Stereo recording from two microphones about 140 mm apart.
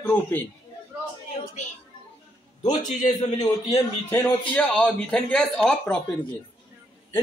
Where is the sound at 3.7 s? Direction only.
15° left (ahead or behind).